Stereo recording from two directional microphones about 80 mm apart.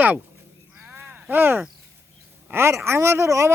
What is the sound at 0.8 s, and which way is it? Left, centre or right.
Crow, right.